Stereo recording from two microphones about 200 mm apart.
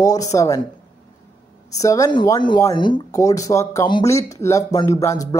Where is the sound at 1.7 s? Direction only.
15° left (ahead or behind).